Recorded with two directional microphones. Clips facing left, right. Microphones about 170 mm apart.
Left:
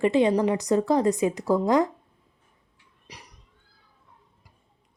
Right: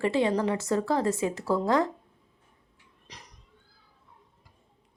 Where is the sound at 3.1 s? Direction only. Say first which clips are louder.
Left 3 dB; 10° left (ahead or behind).